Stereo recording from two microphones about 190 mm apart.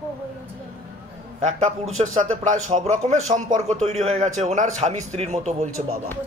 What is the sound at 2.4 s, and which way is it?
A man's voice, 40° right (ahead or behind).